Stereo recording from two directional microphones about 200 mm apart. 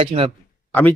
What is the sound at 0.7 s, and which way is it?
Speech, 10° left (ahead or behind).